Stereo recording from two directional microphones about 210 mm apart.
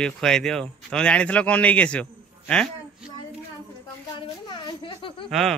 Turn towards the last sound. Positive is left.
turn(degrees=0)  # may be behind; listen again after turning